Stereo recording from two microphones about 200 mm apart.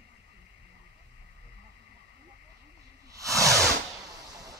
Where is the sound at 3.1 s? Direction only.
15° right (ahead or behind).